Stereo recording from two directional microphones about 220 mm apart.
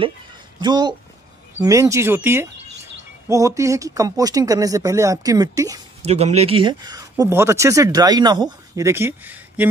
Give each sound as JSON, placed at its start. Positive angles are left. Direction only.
{"t": 0.6, "sound": "speech", "side_deg": -20}
{"t": 6.0, "sound": "speech", "side_deg": -30}